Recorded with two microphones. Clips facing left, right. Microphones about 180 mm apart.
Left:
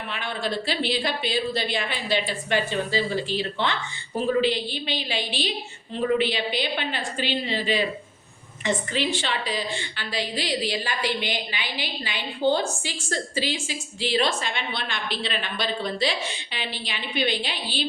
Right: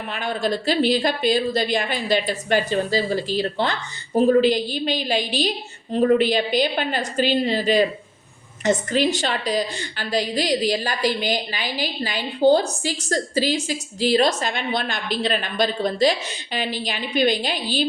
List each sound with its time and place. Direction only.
0.1 s a woman's voice: 40° right (ahead or behind)